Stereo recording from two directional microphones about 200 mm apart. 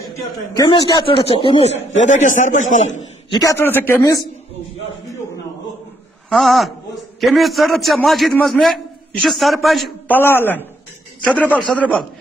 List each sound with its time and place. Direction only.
0.6 s a man's voice: 25° left (ahead or behind)
3.3 s a man's voice: 15° left (ahead or behind)
6.3 s a man's voice: centre (ahead or behind)